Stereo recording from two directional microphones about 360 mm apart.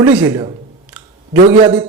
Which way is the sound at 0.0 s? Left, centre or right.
Centre.